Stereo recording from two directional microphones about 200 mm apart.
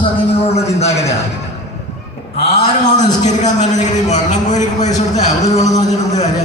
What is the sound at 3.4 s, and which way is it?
A man's voice, 35° left (ahead or behind).